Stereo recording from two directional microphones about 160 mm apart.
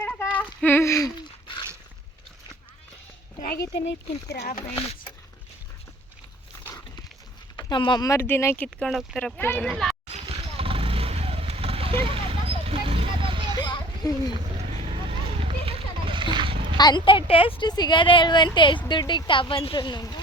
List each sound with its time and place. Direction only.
0.0 s female singing: 10° left (ahead or behind)
0.6 s a sound: 15° left (ahead or behind)
3.4 s speech: 75° left (ahead or behind)
4.3 s speech: 70° left (ahead or behind)
7.5 s speech: 30° left (ahead or behind); by 10.0 s centre (ahead or behind)
10.2 s vehicle: 40° right (ahead or behind)
13.6 s children playing: 25° left (ahead or behind)
14.8 s a sound: 35° right (ahead or behind)
16.7 s speech: 25° left (ahead or behind)